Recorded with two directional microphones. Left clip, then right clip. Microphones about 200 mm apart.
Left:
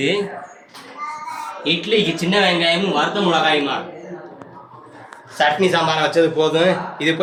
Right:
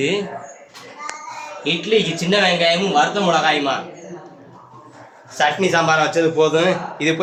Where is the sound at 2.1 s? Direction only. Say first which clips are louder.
Even; 30° right (ahead or behind).